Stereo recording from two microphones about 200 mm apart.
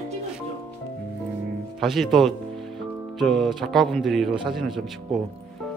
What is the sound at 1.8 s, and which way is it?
A man's voice, centre (ahead or behind).